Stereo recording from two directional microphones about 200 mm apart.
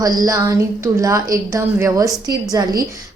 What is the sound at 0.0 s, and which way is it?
A woman's voice, 20° right (ahead or behind).